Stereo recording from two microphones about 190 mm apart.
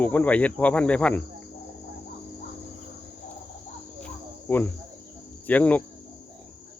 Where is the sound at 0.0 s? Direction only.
10° left (ahead or behind).